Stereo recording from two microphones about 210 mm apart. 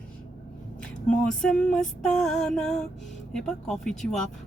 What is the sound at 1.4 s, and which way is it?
Music, 5° left (ahead or behind).